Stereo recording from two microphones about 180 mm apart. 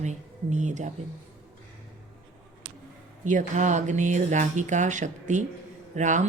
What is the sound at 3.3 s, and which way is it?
Speech, 45° right (ahead or behind).